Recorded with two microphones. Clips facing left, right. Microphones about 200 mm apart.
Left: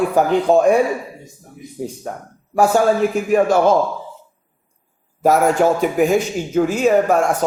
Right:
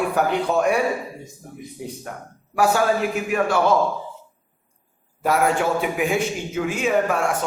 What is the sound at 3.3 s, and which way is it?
Speech, 40° left (ahead or behind).